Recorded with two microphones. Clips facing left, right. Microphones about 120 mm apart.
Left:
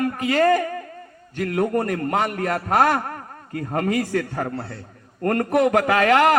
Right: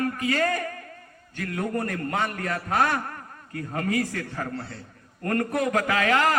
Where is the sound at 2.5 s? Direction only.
55° left (ahead or behind).